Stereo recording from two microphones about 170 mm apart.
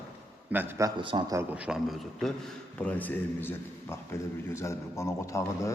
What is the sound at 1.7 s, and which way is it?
Speech, 5° right (ahead or behind).